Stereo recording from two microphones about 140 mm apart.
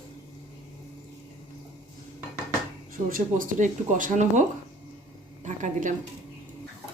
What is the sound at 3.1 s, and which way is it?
Speech, 70° right (ahead or behind).